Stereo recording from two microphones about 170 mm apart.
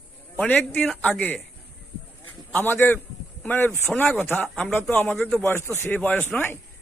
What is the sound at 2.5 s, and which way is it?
A man's voice, 10° left (ahead or behind).